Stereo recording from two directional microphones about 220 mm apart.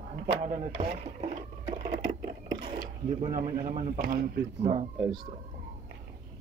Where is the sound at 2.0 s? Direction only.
50° right (ahead or behind).